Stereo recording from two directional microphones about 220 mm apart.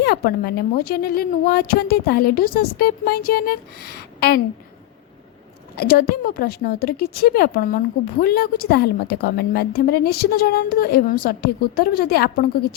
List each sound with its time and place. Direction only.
0.0 s a woman's voice: 45° left (ahead or behind)
5.7 s a woman's voice: 45° left (ahead or behind)